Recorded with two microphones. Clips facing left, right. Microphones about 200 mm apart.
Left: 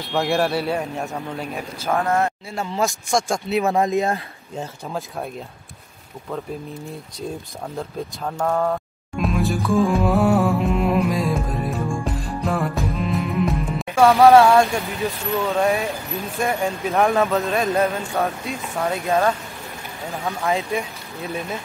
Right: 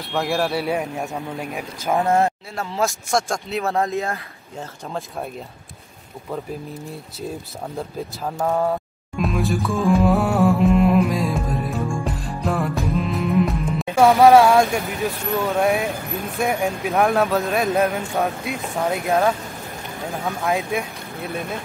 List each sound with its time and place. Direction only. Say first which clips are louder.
0.1 s speech: left 2 dB; centre (ahead or behind)
1.4 s speech: even; 15° right (ahead or behind)
2.5 s speech: even; centre (ahead or behind)
3.6 s speech: left 2 dB; 15° left (ahead or behind)
8.3 s speech: even; 10° right (ahead or behind)
9.2 s music: even; centre (ahead or behind)
13.9 s speech: even; 15° right (ahead or behind)
20.4 s speech: even; centre (ahead or behind)